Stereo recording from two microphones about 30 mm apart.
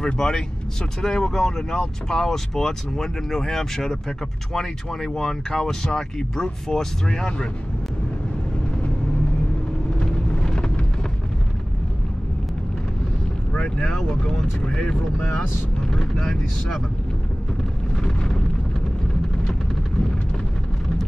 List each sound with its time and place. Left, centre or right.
0.0 s speech: left
9.9 s vehicle: left
13.5 s a sound: left
13.8 s speech: centre
14.2 s speech: left
16.2 s speech: centre
18.0 s eruption: left